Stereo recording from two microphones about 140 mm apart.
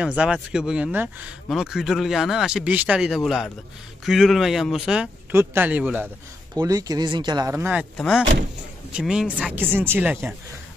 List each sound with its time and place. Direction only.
0.0 s speech: 5° right (ahead or behind)
5.3 s speech: 15° right (ahead or behind)
6.6 s speech: 25° right (ahead or behind)
7.5 s speech: 15° right (ahead or behind)
8.9 s speech: 5° right (ahead or behind)